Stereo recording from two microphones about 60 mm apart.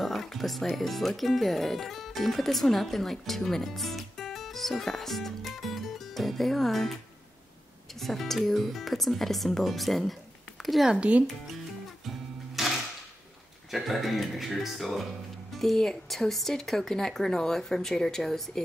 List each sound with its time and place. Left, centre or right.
0.0 s speech: centre
10.9 s speech: centre
12.6 s music: centre
13.7 s speech: centre